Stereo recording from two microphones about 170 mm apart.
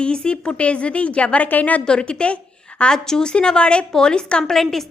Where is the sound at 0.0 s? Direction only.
5° left (ahead or behind).